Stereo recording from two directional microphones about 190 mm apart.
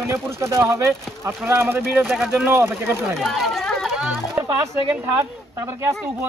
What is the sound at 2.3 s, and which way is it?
Speech, 10° right (ahead or behind).